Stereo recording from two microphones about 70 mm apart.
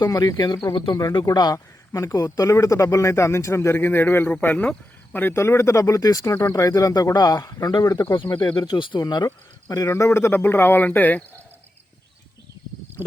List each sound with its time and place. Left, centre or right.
0.1 s speech: left
1.3 s a man's voice: left
1.5 s a man's voice: left
2.1 s speech: left
3.8 s speech: left
4.3 s speech: left
5.3 s speech: left
8.6 s speech: left
10.1 s speech: left